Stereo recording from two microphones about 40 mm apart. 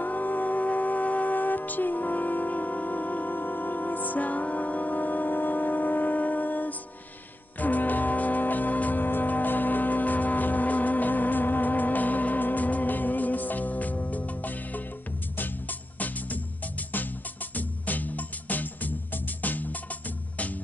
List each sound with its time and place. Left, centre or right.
0.0 s music: left
16.9 s music: left